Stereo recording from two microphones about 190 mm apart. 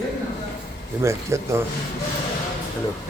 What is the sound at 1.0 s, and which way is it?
Speech, 15° right (ahead or behind).